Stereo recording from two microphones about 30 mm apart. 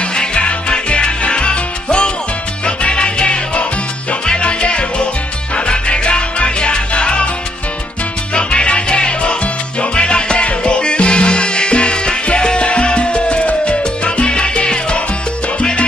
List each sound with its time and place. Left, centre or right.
0.0 s salsa music: left
2.6 s music: left
8.4 s music: left